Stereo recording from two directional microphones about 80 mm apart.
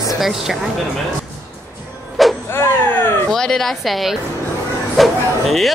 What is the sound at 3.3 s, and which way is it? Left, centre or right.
Speech, centre.